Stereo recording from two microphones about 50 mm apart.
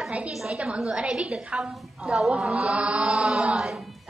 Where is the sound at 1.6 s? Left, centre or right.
Centre.